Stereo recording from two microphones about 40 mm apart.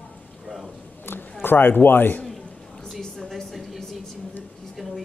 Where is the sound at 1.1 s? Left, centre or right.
Left.